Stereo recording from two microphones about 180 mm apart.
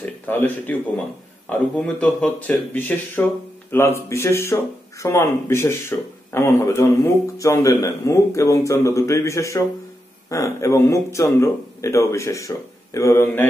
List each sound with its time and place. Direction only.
0.0 s speech: 10° left (ahead or behind)